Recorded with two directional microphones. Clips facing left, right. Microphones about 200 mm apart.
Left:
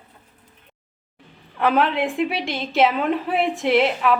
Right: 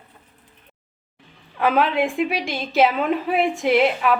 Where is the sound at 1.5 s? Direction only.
Centre (ahead or behind).